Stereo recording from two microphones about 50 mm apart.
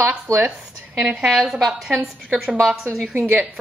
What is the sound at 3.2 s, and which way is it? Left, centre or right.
Speech, right.